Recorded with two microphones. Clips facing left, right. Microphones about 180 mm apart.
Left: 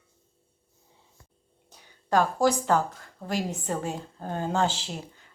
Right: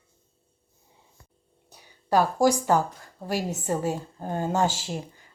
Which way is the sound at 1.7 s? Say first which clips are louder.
Right 2 dB; 10° right (ahead or behind).